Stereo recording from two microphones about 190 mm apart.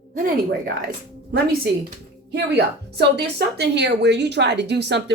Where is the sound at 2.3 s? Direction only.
60° right (ahead or behind).